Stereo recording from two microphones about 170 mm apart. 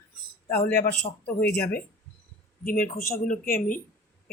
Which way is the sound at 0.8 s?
60° left (ahead or behind).